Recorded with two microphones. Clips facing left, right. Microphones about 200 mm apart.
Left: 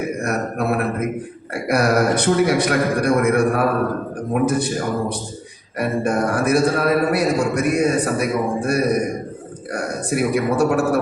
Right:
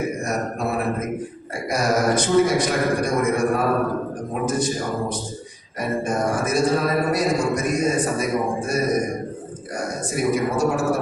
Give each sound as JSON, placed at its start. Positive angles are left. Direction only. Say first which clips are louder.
{"t": 0.2, "sound": "a man's voice", "louder": "left 3 dB", "side_deg": 60}